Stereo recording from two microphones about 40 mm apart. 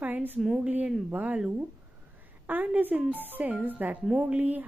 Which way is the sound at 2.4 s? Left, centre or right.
Right.